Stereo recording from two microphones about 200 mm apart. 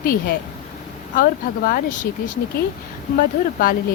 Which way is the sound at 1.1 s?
45° left (ahead or behind).